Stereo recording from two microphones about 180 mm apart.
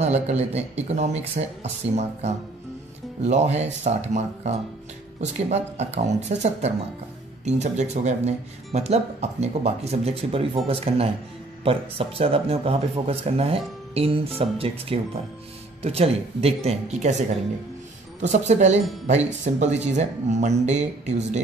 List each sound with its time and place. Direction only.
0.0 s speech: 35° right (ahead or behind)
18.2 s speech: 40° right (ahead or behind)